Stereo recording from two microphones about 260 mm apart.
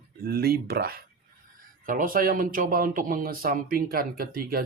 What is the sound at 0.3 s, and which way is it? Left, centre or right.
Speech, right.